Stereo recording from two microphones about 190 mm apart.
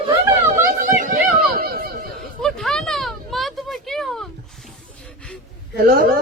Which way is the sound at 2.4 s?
5° left (ahead or behind).